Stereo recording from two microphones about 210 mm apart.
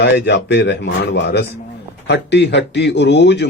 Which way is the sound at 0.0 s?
55° left (ahead or behind).